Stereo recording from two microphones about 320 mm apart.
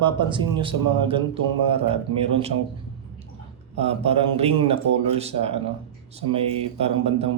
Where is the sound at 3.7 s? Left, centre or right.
Centre.